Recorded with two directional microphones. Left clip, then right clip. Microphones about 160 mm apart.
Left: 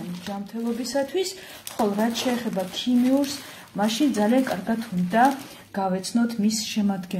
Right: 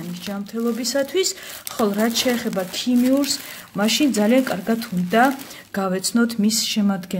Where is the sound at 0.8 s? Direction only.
45° right (ahead or behind).